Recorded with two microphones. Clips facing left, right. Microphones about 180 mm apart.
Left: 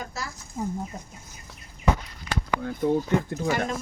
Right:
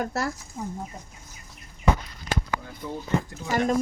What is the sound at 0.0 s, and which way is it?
Speech, 60° right (ahead or behind).